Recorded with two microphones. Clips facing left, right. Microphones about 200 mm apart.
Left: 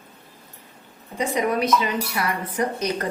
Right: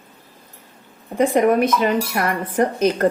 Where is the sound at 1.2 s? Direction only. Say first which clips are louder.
Right 7 dB; 55° right (ahead or behind).